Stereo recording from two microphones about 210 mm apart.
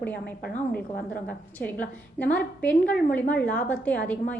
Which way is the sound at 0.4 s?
45° left (ahead or behind).